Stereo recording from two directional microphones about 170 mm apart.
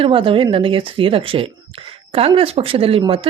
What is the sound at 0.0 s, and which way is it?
Speech, 30° right (ahead or behind).